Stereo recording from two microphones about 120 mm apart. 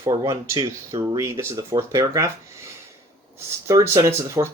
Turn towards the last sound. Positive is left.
turn(degrees=-25)  # may be behind; listen again after turning